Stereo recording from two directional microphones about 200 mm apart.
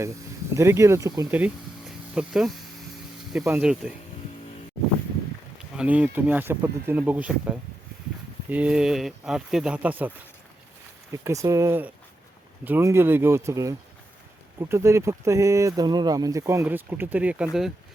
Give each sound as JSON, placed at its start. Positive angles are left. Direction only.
{"t": 0.5, "sound": "speech", "side_deg": -15}
{"t": 5.7, "sound": "speech", "side_deg": -5}
{"t": 11.1, "sound": "speech", "side_deg": -15}